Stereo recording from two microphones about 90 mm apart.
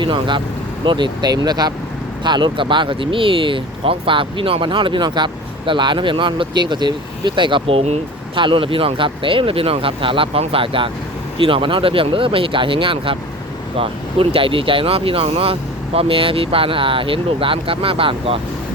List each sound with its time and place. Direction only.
0.0 s speech: 65° right (ahead or behind); by 1.7 s 50° right (ahead or behind)
2.2 s speech: 60° right (ahead or behind); by 13.1 s 80° right
13.7 s speech: 90° right